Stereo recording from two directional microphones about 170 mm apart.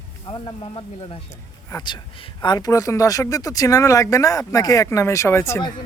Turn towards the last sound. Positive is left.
turn(degrees=15)  # may be behind; listen again after turning